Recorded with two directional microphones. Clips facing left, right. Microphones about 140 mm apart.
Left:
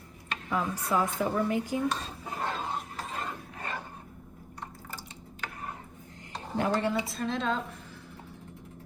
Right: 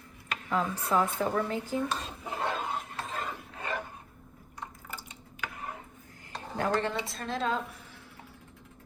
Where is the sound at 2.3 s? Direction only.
20° right (ahead or behind).